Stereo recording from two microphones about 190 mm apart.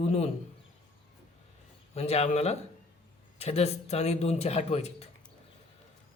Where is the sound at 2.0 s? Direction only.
35° left (ahead or behind).